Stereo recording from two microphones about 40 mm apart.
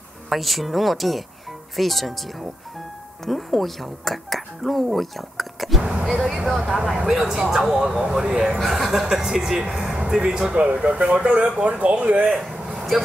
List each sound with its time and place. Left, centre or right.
0.3 s speech: centre
3.3 s speech: centre
5.8 s a sound: centre
6.2 s a man's voice: centre
8.5 s speech: centre
8.9 s a man's voice: centre
10.5 s speech: right
12.4 s a sound: centre